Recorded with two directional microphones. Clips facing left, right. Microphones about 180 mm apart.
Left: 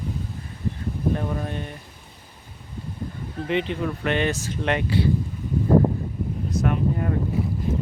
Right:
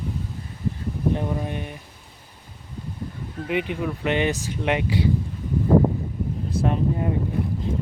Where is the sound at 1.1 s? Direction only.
15° right (ahead or behind).